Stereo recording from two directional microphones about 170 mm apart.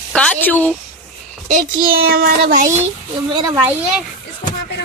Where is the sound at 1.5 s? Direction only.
55° right (ahead or behind).